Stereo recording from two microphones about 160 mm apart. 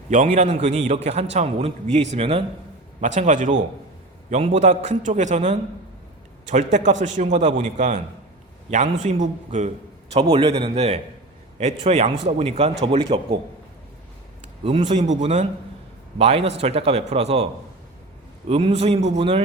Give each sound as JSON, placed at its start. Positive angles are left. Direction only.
{"t": 0.1, "sound": "a man's voice", "side_deg": -50}
{"t": 10.3, "sound": "a man's voice", "side_deg": -35}
{"t": 14.6, "sound": "a man's voice", "side_deg": -40}